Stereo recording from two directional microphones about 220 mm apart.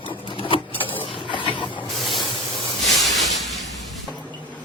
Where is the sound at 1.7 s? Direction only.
Centre (ahead or behind).